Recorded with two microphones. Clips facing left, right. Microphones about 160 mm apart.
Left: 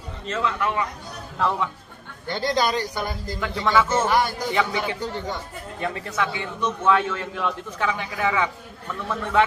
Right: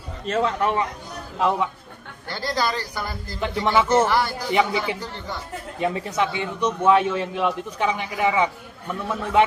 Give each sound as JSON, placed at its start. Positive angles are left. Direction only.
{"t": 0.3, "sound": "a man's voice", "side_deg": -40}
{"t": 1.4, "sound": "a man's voice", "side_deg": -15}
{"t": 2.2, "sound": "a man's voice", "side_deg": 20}
{"t": 3.3, "sound": "a man's voice", "side_deg": -20}
{"t": 4.1, "sound": "a man's voice", "side_deg": 20}
{"t": 4.5, "sound": "a man's voice", "side_deg": -15}